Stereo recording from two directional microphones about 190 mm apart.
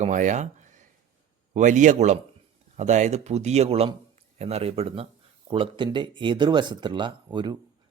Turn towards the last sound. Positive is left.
turn(degrees=-25)  # may be behind; listen again after turning